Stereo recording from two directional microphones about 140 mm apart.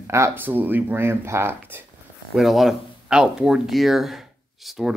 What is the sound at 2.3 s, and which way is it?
Speech, centre (ahead or behind).